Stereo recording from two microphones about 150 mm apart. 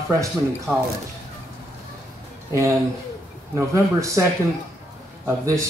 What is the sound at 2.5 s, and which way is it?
Speech, 20° right (ahead or behind).